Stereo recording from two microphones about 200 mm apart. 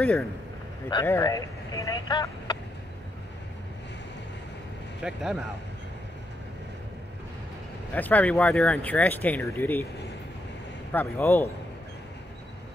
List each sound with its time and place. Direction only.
0.0 s speech: 5° left (ahead or behind)
5.0 s speech: 5° right (ahead or behind)
7.9 s speech: 10° left (ahead or behind)
10.9 s speech: 10° left (ahead or behind)